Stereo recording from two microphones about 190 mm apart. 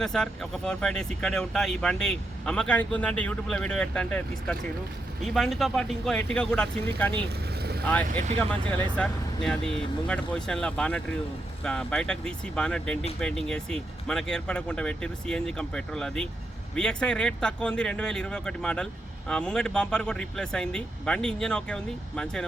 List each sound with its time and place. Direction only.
0.0 s speech: 5° left (ahead or behind)
7.6 s vehicle: 55° right (ahead or behind)
8.4 s speech: 10° left (ahead or behind)